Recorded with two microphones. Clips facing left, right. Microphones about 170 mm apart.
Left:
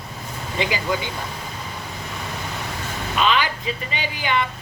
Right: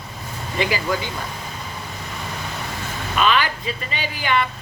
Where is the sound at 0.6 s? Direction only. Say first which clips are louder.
Right 1 dB; 20° left (ahead or behind).